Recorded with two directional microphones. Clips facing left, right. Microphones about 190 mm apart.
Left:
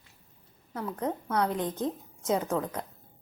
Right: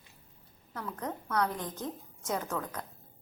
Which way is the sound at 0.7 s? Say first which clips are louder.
Left 6 dB; 20° left (ahead or behind).